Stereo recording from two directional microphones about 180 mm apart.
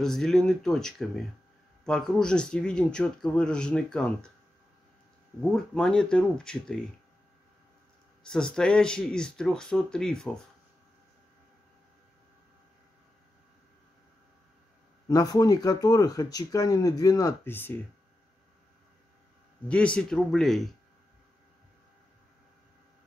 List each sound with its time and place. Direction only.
0.0 s speech: 5° left (ahead or behind)
5.4 s speech: centre (ahead or behind)
8.2 s speech: 5° left (ahead or behind)
15.0 s speech: 20° left (ahead or behind)
19.7 s speech: 5° left (ahead or behind)